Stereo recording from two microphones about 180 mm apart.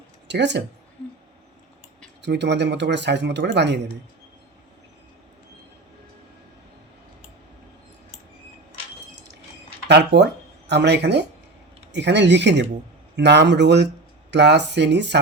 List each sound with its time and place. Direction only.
0.3 s speech: 75° right (ahead or behind)
2.2 s speech: 70° right (ahead or behind)
9.8 s speech: 65° right (ahead or behind)